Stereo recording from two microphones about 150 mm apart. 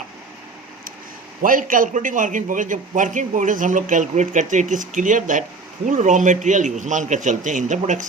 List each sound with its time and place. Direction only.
1.4 s a man's voice: 65° right (ahead or behind)